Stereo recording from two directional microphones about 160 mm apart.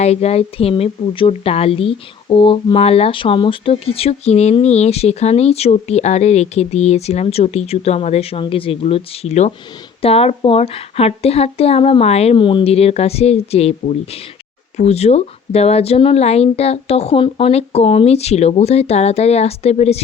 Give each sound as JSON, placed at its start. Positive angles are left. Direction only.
{"t": 0.0, "sound": "a woman's voice", "side_deg": 40}